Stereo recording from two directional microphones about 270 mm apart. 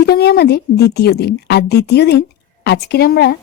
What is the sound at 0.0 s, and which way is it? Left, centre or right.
Speech, left.